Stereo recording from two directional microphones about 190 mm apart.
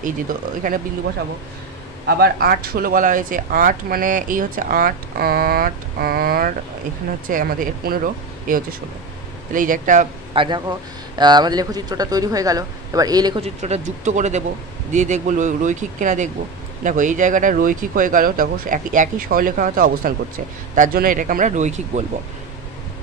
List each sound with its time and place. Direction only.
0.6 s speech: 45° right (ahead or behind)
2.0 s speech: 55° right (ahead or behind)
10.3 s speech: 25° right (ahead or behind)
13.4 s speech: 35° right (ahead or behind)